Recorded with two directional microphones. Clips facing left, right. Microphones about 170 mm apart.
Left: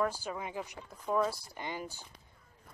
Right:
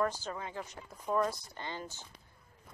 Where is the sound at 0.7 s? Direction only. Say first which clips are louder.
Even; centre (ahead or behind).